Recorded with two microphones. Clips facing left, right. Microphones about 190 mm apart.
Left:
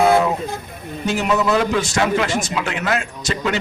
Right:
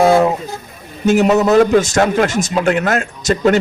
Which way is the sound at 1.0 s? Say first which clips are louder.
Right 7 dB; 45° right (ahead or behind).